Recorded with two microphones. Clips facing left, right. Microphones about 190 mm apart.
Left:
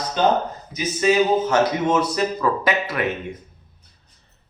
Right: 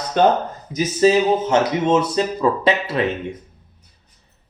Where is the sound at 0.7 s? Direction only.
40° right (ahead or behind).